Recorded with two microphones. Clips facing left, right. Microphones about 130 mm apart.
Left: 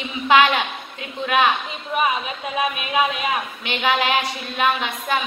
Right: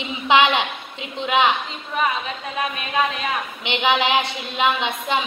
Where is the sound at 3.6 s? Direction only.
20° right (ahead or behind).